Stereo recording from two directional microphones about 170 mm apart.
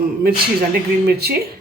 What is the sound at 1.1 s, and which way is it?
Speech, 70° right (ahead or behind).